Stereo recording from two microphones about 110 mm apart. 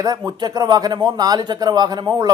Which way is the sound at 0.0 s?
40° right (ahead or behind).